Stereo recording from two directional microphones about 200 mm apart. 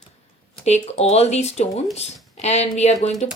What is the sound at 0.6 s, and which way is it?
Speech, 35° left (ahead or behind).